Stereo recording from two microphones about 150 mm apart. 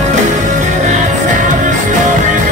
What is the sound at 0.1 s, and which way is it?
Music, 55° right (ahead or behind).